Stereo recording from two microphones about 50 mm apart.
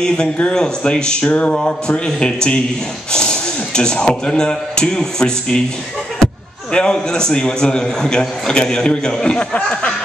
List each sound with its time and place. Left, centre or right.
0.6 s a man's voice: centre